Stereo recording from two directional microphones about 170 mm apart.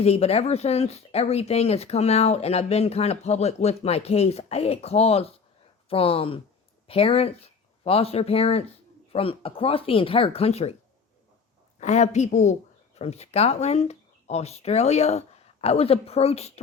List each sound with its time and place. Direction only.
0.0 s speech: 35° left (ahead or behind)
11.8 s a woman's voice: 45° left (ahead or behind)